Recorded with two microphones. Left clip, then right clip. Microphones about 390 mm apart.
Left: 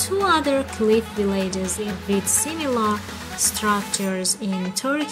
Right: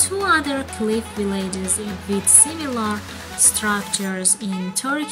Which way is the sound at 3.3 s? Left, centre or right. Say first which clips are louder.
Even; centre.